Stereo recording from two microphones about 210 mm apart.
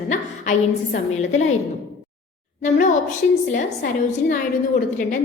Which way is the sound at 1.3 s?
35° left (ahead or behind).